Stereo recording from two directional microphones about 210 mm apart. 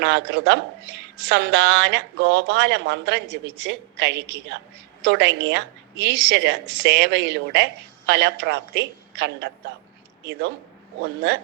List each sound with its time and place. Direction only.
0.0 s a woman's voice: 55° right (ahead or behind)
11.0 s speech: 55° right (ahead or behind)